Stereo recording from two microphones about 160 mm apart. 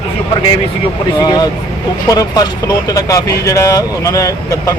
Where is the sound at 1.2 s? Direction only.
25° left (ahead or behind).